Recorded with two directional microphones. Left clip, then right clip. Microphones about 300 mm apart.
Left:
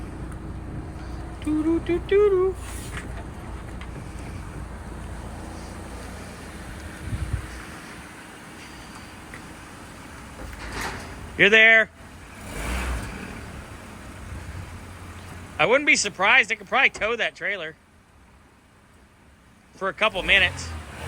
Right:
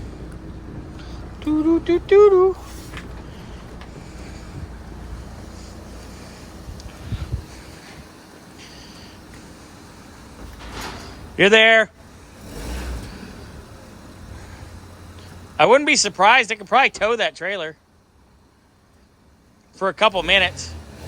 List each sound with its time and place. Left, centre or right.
1.4 s speech: centre
11.3 s speech: centre
15.5 s speech: centre
19.8 s speech: centre